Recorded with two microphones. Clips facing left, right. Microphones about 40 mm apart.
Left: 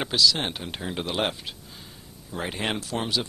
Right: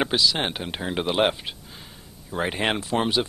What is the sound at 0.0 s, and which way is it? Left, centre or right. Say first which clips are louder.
Speech: right 1 dB; right.